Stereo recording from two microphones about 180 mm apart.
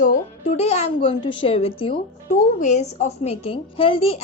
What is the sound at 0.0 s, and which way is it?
A woman's voice, 45° left (ahead or behind).